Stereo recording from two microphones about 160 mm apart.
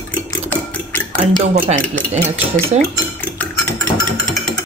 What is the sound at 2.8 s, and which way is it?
Dishes, 10° left (ahead or behind).